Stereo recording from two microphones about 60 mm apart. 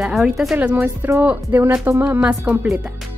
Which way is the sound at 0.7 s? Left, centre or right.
Right.